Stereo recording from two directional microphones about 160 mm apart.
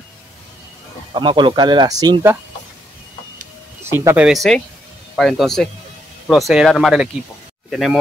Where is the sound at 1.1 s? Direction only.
30° right (ahead or behind).